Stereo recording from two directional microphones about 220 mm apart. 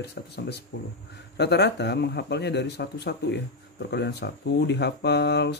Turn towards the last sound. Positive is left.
turn(degrees=50)  # may be behind; listen again after turning